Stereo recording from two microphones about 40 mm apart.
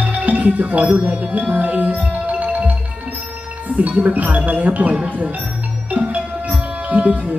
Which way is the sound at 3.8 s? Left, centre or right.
Right.